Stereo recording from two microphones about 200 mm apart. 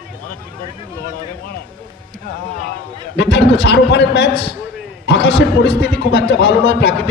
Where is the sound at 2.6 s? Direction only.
55° left (ahead or behind).